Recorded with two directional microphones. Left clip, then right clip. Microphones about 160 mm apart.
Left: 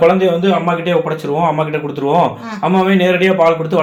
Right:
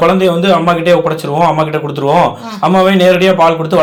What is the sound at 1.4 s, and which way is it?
A man's voice, 40° right (ahead or behind).